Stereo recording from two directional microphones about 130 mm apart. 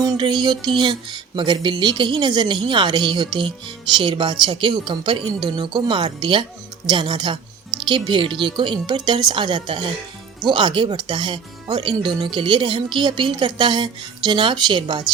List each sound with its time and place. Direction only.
0.2 s speech: 35° right (ahead or behind)